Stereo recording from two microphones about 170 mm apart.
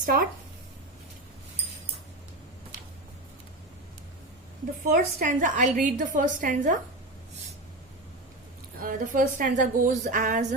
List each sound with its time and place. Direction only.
0.0 s speech: 55° right (ahead or behind)
4.9 s a woman's voice: 50° right (ahead or behind)
8.8 s a woman's voice: 55° right (ahead or behind)